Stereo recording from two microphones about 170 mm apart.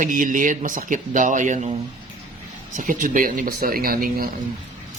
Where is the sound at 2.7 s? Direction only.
50° right (ahead or behind).